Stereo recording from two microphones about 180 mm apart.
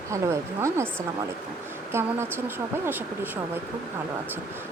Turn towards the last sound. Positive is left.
turn(degrees=-10)  # may be behind; listen again after turning